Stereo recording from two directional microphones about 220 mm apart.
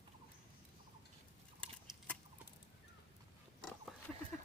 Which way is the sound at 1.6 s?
5° left (ahead or behind).